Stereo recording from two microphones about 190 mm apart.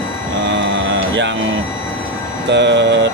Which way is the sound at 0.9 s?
70° right (ahead or behind).